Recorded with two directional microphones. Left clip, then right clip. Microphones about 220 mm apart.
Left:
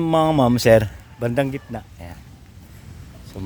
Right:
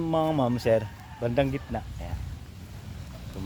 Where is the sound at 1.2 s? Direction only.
30° left (ahead or behind).